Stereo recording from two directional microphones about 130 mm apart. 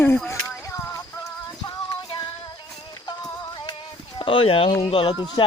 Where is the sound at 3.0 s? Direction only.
35° left (ahead or behind).